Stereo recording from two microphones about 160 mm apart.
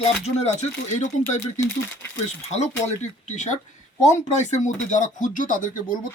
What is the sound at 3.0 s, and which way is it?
Speech, 50° left (ahead or behind).